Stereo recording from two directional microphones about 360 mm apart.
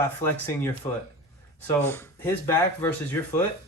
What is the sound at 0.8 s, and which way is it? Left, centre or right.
A man's voice, centre.